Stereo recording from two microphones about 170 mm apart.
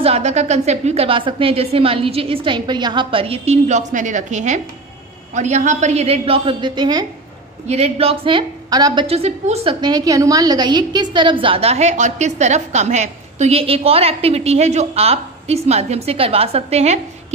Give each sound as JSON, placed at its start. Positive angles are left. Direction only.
{"t": 0.0, "sound": "a woman's voice", "side_deg": -40}
{"t": 7.6, "sound": "a woman's voice", "side_deg": -40}
{"t": 9.0, "sound": "a woman's voice", "side_deg": -35}